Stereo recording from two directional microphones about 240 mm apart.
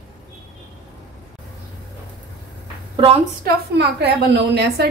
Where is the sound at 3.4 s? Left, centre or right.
Right.